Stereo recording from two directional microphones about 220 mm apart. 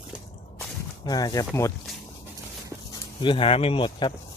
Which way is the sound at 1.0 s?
15° left (ahead or behind).